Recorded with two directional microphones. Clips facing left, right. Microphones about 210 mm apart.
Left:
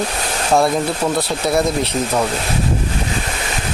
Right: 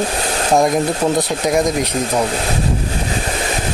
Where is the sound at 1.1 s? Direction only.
15° right (ahead or behind).